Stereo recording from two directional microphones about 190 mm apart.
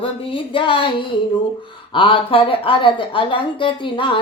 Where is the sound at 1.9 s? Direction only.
25° left (ahead or behind).